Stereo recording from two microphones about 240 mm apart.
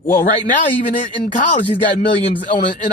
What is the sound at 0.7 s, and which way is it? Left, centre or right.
Speech, left.